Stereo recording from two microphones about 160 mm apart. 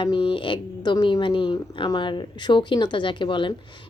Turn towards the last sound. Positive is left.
turn(degrees=30)  # may be behind; listen again after turning